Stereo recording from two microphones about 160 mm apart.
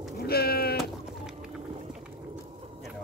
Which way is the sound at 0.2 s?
75° left (ahead or behind).